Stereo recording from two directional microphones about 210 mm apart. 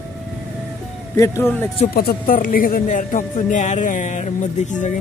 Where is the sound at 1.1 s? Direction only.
15° left (ahead or behind).